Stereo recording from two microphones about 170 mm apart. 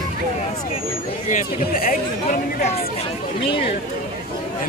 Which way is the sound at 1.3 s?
50° left (ahead or behind).